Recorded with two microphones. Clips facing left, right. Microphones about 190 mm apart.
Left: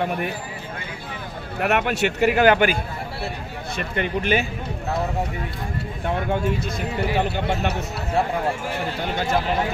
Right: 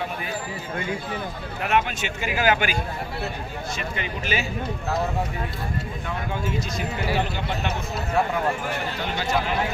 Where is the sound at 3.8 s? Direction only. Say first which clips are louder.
Left 10 dB; 55° left (ahead or behind).